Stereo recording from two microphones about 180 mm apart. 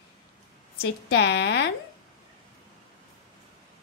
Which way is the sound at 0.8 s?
65° left (ahead or behind).